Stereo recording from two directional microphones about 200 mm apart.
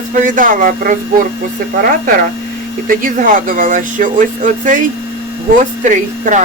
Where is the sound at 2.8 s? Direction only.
45° right (ahead or behind).